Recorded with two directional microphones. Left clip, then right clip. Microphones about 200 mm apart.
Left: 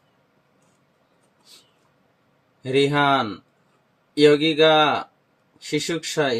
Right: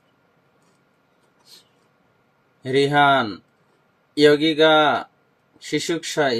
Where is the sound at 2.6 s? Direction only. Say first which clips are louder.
Right 3 dB; 10° right (ahead or behind).